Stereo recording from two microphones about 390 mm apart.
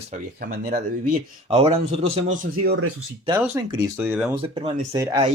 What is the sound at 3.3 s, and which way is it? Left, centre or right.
Speech, centre.